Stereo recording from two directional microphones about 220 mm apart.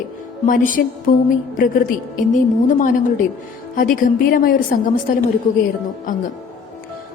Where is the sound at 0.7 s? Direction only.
40° left (ahead or behind).